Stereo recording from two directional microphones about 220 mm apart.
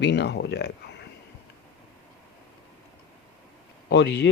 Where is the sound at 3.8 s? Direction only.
50° left (ahead or behind).